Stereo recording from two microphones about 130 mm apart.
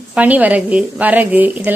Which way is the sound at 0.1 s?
10° right (ahead or behind).